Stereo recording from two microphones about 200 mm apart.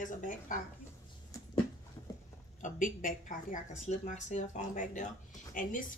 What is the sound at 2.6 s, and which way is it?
A woman's voice, 40° left (ahead or behind).